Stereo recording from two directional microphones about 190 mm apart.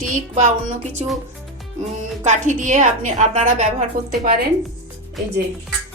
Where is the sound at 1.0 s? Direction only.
Centre (ahead or behind).